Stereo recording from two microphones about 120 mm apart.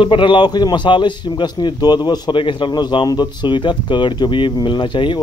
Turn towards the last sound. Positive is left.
turn(degrees=40)  # may be behind; listen again after turning